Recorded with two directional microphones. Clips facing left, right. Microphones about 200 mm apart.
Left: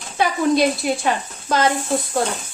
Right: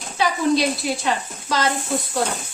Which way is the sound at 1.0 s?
50° left (ahead or behind).